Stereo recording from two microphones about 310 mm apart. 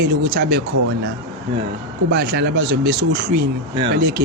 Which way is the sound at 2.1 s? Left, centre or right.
Right.